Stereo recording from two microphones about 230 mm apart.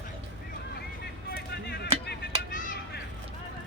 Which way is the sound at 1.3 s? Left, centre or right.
Left.